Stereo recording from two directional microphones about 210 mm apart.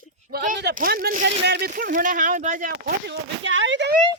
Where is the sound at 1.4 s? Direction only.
55° right (ahead or behind).